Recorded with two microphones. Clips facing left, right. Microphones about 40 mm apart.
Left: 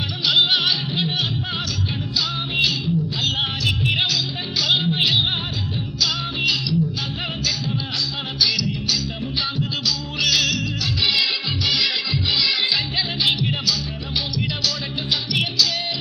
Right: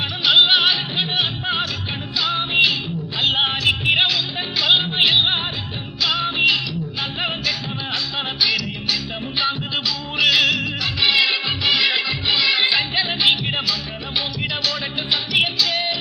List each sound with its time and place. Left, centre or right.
0.3 s music: right
8.4 s music: right
10.2 s music: right
15.1 s music: right